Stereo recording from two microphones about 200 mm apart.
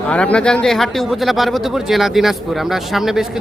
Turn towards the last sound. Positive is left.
turn(degrees=0)  # may be behind; listen again after turning